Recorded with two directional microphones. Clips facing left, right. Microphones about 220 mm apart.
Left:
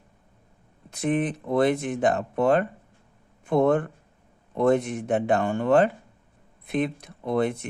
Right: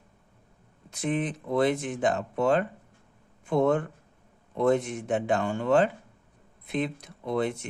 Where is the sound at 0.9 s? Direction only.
55° left (ahead or behind).